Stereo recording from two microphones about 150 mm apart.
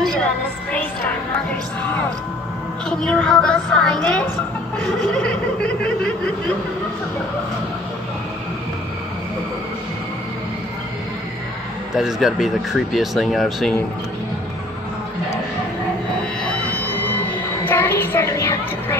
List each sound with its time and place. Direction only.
0.0 s music: 5° left (ahead or behind)
2.9 s speech: 5° left (ahead or behind)
11.9 s speech: 5° right (ahead or behind)
16.7 s music: 15° left (ahead or behind)
17.6 s child singing: 15° left (ahead or behind)